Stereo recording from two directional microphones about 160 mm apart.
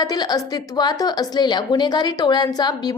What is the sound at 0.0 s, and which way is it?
A woman's voice, 25° left (ahead or behind).